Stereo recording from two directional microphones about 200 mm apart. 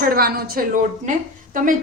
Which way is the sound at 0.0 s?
50° right (ahead or behind).